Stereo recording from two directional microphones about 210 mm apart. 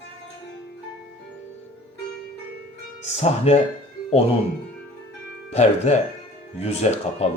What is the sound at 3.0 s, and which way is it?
Speech, 30° left (ahead or behind).